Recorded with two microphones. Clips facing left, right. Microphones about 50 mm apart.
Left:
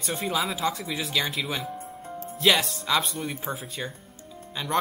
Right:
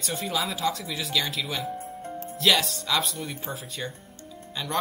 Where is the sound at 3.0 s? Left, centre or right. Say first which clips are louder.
Left 2 dB; centre.